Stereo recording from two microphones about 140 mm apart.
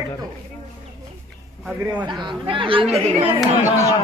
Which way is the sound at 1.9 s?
35° right (ahead or behind).